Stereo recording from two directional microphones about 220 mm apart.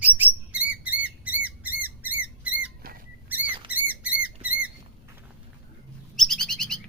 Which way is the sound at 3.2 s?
10° right (ahead or behind).